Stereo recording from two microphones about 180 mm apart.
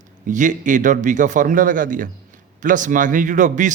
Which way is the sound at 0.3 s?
45° right (ahead or behind).